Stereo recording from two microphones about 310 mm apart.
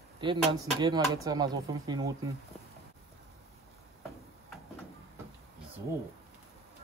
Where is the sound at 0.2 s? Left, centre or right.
Centre.